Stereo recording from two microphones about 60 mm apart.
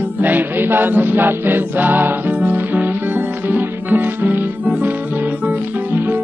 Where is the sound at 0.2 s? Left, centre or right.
Right.